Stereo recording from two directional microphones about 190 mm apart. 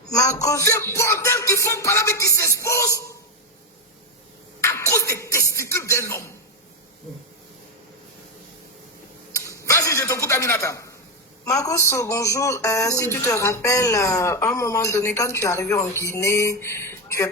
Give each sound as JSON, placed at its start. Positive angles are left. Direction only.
{"t": 0.2, "sound": "music", "side_deg": 35}
{"t": 0.4, "sound": "speech", "side_deg": 15}
{"t": 4.6, "sound": "a sound", "side_deg": 15}
{"t": 9.6, "sound": "a man's voice", "side_deg": 15}